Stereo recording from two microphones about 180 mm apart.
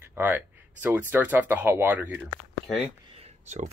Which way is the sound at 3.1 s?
35° right (ahead or behind).